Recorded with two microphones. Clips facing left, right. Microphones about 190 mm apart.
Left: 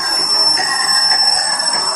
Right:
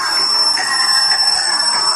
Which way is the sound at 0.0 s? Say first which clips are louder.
Left 2 dB; 30° left (ahead or behind).